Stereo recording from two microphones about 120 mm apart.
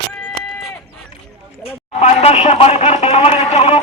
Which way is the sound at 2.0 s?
65° left (ahead or behind).